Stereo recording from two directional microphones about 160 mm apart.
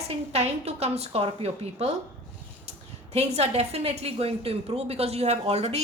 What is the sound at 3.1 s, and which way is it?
A woman's voice, 40° right (ahead or behind).